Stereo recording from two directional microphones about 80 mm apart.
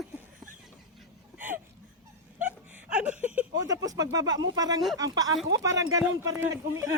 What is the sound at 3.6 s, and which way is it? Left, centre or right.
Speech, right.